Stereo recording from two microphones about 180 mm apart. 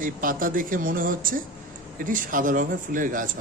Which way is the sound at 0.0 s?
50° right (ahead or behind).